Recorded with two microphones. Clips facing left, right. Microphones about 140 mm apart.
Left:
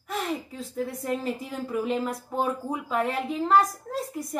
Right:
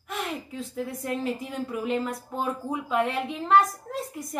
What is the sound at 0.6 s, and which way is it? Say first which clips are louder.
A woman's voice: left 1 dB; centre (ahead or behind).